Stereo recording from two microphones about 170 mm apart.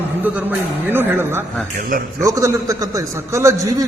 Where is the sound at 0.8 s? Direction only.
10° right (ahead or behind).